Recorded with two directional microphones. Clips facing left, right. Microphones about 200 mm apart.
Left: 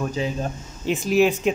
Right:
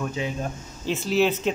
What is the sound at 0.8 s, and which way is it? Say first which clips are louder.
Speech: left 3 dB; 15° left (ahead or behind).